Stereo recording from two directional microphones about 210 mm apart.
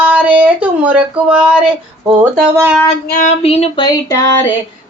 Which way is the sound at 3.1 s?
35° left (ahead or behind).